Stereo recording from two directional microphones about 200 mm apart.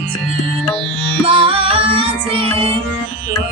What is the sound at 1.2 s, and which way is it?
Music, 25° right (ahead or behind).